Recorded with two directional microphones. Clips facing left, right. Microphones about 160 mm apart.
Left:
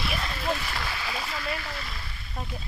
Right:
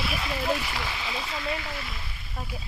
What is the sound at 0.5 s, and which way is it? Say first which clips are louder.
Speech: right 1 dB; 15° right (ahead or behind).